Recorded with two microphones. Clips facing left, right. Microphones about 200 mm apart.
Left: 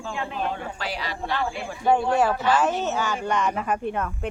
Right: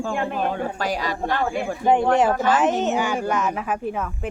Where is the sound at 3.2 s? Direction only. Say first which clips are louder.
Right 1 dB; 5° right (ahead or behind).